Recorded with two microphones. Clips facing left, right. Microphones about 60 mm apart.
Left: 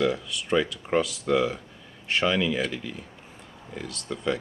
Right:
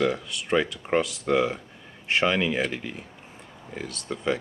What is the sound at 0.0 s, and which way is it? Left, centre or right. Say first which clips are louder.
Speech: even; right.